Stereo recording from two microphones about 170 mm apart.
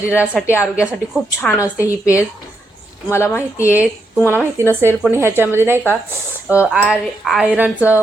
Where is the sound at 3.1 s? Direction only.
15° left (ahead or behind).